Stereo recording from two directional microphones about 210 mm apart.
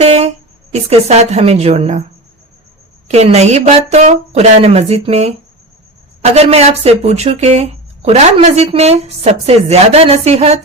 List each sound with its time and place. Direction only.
0.0 s a sound: 30° right (ahead or behind)
0.7 s speech: 30° right (ahead or behind)
3.1 s speech: 30° right (ahead or behind)
6.3 s speech: 30° right (ahead or behind)